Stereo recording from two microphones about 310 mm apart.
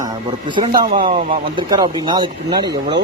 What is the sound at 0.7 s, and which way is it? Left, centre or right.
A man's voice, right.